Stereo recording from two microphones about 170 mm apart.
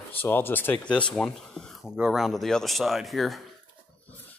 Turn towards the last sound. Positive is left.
turn(degrees=0)  # may be behind; listen again after turning